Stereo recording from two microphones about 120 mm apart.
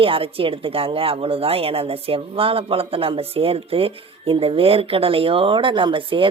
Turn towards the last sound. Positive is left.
turn(degrees=-45)  # may be behind; listen again after turning